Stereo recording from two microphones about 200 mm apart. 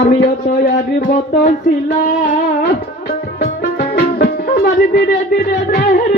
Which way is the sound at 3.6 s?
55° left (ahead or behind).